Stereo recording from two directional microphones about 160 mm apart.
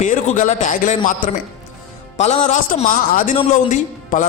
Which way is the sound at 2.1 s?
45° left (ahead or behind).